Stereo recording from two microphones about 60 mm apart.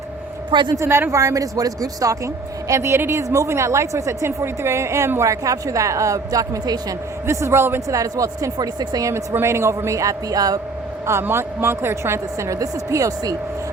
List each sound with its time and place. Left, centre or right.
0.8 s a man's voice: right
1.1 s speech: right
3.2 s a woman's voice: right
5.3 s speech: right
7.3 s a woman's voice: right
7.9 s speech: right
9.1 s speech: right
11.2 s a woman's voice: right